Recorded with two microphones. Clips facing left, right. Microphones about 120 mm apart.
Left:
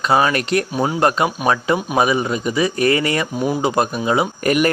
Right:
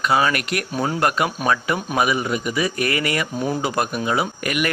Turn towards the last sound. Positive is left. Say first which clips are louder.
# left 7 dB
turn(degrees=35)  # may be behind; listen again after turning